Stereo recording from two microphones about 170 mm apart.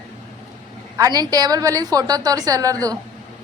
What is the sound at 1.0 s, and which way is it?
A woman's voice, 20° right (ahead or behind).